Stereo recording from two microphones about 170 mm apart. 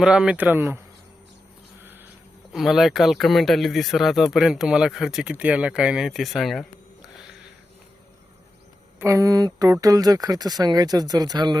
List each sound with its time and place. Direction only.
0.0 s speech: 5° right (ahead or behind)
1.8 s a sound: 10° right (ahead or behind)
2.5 s speech: centre (ahead or behind)
9.0 s speech: 15° right (ahead or behind)